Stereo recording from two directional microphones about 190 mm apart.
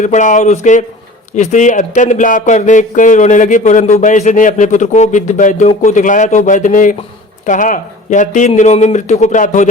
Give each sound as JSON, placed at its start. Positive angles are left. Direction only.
{"t": 0.0, "sound": "speech", "side_deg": 40}